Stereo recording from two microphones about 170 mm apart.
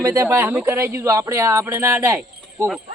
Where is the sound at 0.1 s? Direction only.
15° right (ahead or behind).